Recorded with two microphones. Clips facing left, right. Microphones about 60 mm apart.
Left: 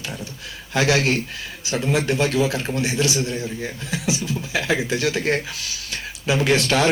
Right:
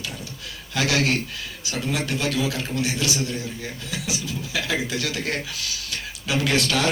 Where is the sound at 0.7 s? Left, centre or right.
Left.